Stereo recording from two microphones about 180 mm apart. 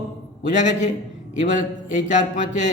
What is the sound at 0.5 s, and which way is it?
Speech, 40° left (ahead or behind).